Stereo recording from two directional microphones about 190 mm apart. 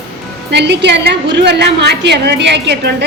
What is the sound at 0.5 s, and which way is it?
A woman's voice, 65° right (ahead or behind).